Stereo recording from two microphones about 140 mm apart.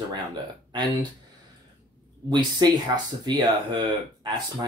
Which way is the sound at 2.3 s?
30° right (ahead or behind).